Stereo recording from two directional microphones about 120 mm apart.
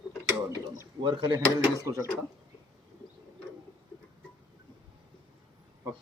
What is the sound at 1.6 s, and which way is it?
Speech, 25° right (ahead or behind).